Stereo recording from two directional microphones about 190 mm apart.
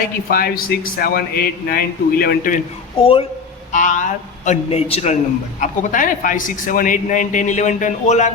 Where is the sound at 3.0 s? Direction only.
30° left (ahead or behind).